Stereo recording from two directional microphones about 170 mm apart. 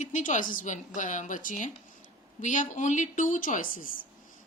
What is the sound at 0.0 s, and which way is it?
A woman's voice, 45° left (ahead or behind).